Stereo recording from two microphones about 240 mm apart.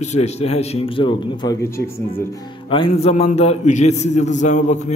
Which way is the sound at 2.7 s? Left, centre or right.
Left.